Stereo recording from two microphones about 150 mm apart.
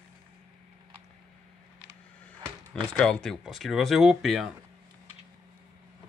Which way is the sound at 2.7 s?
5° left (ahead or behind).